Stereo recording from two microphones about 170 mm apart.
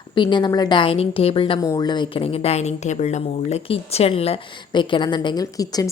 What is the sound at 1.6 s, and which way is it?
A woman's voice, 20° left (ahead or behind).